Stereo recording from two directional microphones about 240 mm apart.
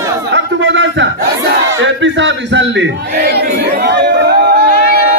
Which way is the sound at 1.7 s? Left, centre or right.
Right.